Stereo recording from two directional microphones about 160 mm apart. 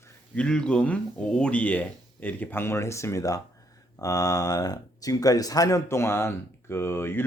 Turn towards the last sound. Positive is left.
turn(degrees=15)  # may be behind; listen again after turning